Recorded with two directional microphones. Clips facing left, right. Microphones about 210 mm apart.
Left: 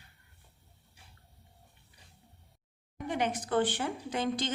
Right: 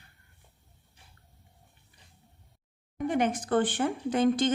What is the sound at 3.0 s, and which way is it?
Speech, 50° right (ahead or behind).